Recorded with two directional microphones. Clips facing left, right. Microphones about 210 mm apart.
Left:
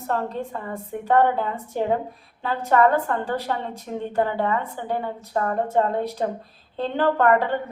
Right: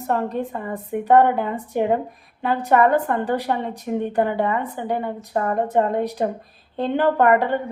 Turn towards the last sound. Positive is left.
turn(degrees=-15)  # may be behind; listen again after turning